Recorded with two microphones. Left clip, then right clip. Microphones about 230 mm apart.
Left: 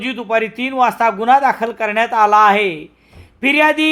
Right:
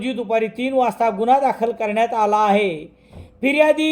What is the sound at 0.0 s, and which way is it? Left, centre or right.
Speech, centre.